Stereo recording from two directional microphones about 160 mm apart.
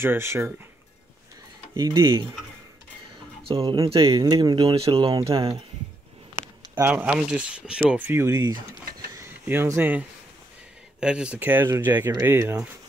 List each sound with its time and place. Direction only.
0.0 s speech: 15° right (ahead or behind)
1.8 s speech: 25° right (ahead or behind)
3.4 s speech: 35° right (ahead or behind)
6.7 s speech: 10° right (ahead or behind)
9.1 s a sound: 15° right (ahead or behind)
11.0 s speech: 5° right (ahead or behind)